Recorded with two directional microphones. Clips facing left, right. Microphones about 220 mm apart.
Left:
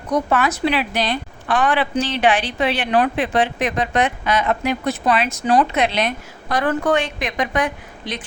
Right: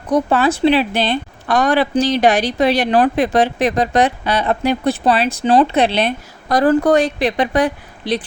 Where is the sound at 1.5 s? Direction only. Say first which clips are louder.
Right 4 dB; 40° right (ahead or behind).